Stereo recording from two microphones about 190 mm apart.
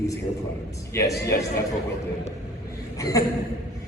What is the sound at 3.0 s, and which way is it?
Speech, 15° left (ahead or behind).